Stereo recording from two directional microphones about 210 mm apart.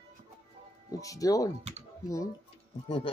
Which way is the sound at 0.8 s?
15° left (ahead or behind).